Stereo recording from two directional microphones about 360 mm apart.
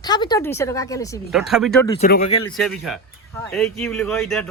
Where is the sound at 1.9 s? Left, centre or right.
Left.